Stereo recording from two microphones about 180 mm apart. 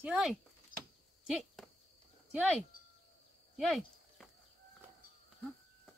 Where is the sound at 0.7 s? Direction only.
50° left (ahead or behind).